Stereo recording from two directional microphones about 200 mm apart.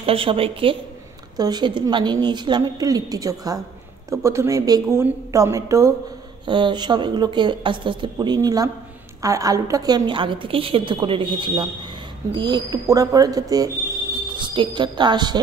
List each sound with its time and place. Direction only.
0.0 s a woman's voice: 25° right (ahead or behind)